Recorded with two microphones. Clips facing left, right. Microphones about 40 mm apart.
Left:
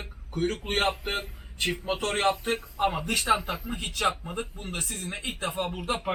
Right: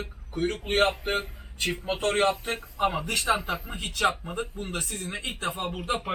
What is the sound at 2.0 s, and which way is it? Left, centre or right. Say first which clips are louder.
Speech: right 3 dB; right.